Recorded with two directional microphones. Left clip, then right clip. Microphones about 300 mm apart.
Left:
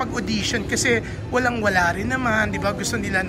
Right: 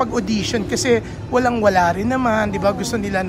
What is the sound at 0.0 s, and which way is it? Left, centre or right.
A man's voice, centre.